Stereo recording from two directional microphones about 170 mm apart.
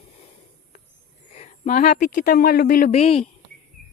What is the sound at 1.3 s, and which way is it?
Speech, 40° left (ahead or behind).